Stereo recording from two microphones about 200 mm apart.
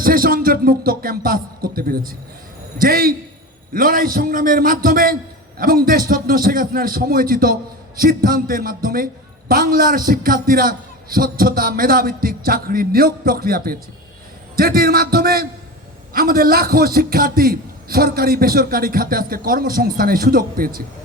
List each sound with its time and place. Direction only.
0.0 s a man's voice: 45° right (ahead or behind)